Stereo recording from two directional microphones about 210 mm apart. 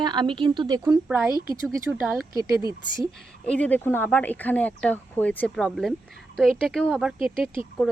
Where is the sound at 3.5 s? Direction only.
5° left (ahead or behind).